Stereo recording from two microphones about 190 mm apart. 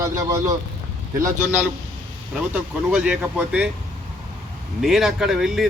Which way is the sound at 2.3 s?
5° right (ahead or behind).